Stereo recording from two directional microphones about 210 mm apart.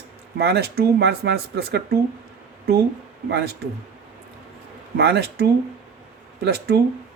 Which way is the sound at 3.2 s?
50° right (ahead or behind).